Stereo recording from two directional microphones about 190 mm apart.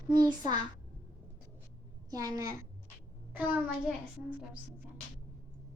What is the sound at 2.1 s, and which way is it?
A child's voice, 20° right (ahead or behind).